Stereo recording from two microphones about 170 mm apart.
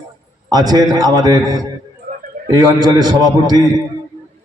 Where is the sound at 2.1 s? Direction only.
50° right (ahead or behind).